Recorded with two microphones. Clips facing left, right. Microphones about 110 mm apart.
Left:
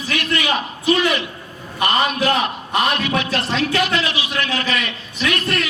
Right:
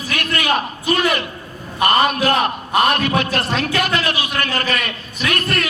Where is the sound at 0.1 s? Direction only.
50° right (ahead or behind).